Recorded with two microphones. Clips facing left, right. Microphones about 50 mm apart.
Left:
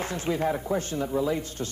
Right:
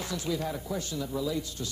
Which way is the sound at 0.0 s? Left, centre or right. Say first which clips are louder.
Left 5 dB; left.